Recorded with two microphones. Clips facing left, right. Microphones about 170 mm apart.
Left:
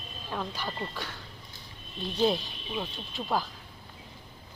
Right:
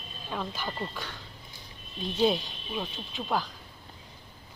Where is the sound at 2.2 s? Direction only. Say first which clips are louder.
Right 1 dB; centre (ahead or behind).